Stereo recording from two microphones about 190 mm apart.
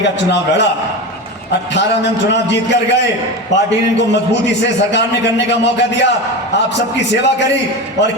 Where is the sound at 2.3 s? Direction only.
65° left (ahead or behind).